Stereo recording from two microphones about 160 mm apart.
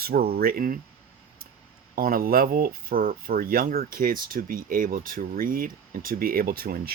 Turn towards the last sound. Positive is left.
turn(degrees=-70)  # may be behind; listen again after turning